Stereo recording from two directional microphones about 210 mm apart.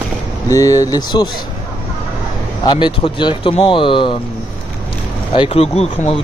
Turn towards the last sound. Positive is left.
turn(degrees=30)  # may be behind; listen again after turning